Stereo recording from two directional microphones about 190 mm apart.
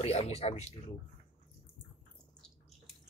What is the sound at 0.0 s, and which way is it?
Speech, 35° left (ahead or behind).